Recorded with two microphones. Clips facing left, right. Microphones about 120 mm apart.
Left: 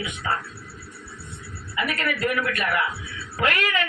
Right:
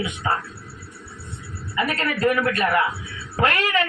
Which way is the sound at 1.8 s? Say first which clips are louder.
Right 4 dB; 35° right (ahead or behind).